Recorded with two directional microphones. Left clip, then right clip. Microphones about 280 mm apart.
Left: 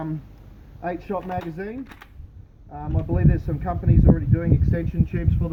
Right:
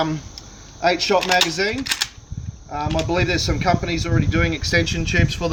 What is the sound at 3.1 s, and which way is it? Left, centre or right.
Speech, centre.